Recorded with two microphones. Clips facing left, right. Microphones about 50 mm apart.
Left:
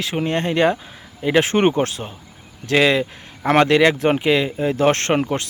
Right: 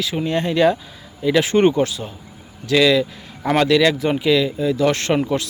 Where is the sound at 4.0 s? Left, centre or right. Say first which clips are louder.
Even; left.